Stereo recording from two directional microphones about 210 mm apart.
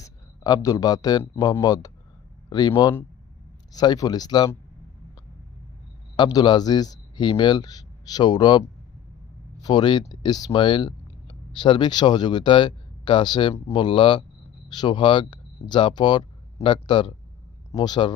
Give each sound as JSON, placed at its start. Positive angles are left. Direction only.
{"t": 0.0, "sound": "speech", "side_deg": 20}
{"t": 6.1, "sound": "speech", "side_deg": 20}
{"t": 9.6, "sound": "a man's voice", "side_deg": 20}